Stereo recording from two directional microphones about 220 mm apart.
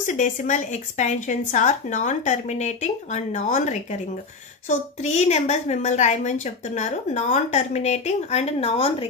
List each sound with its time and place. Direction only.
0.0 s a woman's voice: 35° left (ahead or behind)